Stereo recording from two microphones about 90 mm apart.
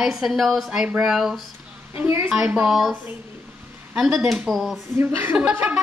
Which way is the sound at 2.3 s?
10° right (ahead or behind).